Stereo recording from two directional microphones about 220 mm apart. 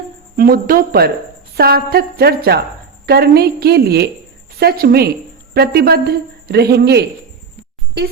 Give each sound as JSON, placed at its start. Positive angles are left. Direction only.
{"t": 0.3, "sound": "a man's voice", "side_deg": -40}